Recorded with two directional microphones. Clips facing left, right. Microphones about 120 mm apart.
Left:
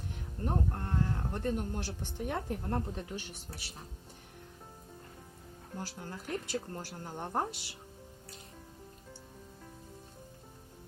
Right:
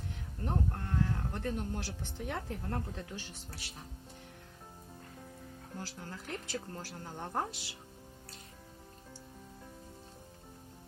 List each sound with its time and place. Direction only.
0.4 s speech: 20° left (ahead or behind)
5.7 s speech: 15° left (ahead or behind)